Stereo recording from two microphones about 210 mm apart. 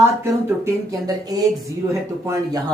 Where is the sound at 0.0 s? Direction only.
10° right (ahead or behind).